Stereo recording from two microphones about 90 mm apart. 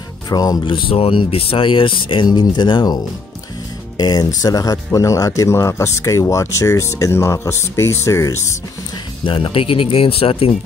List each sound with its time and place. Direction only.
0.3 s speech: 45° left (ahead or behind)
0.7 s speech: 85° left; by 3.0 s 55° left (ahead or behind)
4.0 s speech: 50° left (ahead or behind); by 8.5 s 35° left (ahead or behind)
9.2 s speech: 75° left (ahead or behind); by 10.5 s 90° left